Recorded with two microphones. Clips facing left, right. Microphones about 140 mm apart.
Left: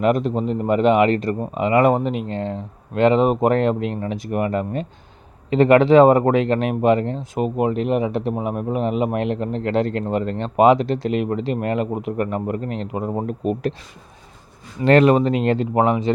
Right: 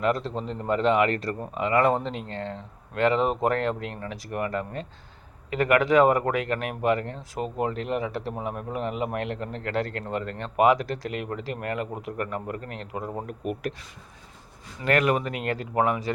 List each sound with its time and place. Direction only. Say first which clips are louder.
0.0 s speech: left 7 dB; 20° left (ahead or behind)
14.8 s speech: left 9 dB; 30° left (ahead or behind)